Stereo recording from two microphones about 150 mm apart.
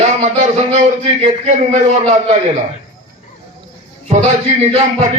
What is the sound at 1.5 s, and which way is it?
Speech, 50° right (ahead or behind).